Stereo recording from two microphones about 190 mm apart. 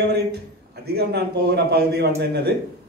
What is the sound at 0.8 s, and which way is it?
A man's voice, 60° right (ahead or behind).